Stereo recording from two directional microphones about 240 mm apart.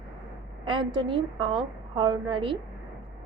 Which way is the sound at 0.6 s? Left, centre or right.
Centre.